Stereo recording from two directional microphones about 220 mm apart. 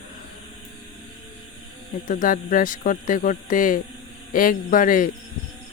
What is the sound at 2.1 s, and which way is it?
Speech, 40° left (ahead or behind).